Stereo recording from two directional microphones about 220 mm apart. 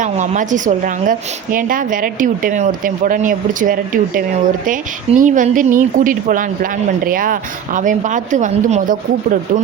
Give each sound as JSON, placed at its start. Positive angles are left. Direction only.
{"t": 0.0, "sound": "a woman's voice", "side_deg": -35}